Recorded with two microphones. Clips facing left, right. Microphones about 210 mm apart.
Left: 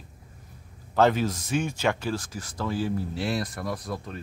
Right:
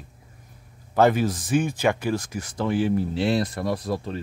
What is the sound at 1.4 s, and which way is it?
Speech, 50° right (ahead or behind).